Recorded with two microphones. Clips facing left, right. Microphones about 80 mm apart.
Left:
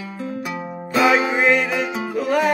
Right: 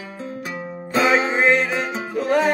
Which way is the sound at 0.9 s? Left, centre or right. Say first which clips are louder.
Left 1 dB; right.